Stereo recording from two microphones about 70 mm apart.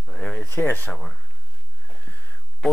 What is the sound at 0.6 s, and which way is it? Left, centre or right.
Speech, left.